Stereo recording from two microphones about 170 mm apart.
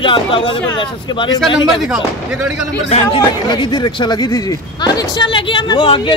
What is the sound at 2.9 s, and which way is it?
Speech, 35° left (ahead or behind).